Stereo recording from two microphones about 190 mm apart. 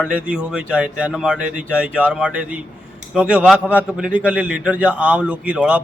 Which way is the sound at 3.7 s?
10° left (ahead or behind).